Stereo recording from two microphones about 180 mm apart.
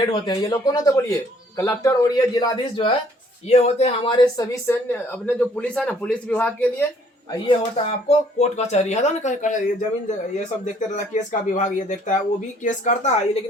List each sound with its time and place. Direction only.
0.0 s speech: 25° left (ahead or behind)
3.5 s speech: 35° left (ahead or behind); by 6.8 s 10° left (ahead or behind)
8.0 s speech: 40° left (ahead or behind)
10.8 s speech: 45° left (ahead or behind)